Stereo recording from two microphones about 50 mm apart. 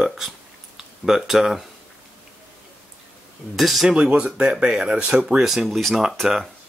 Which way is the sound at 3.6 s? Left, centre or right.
Centre.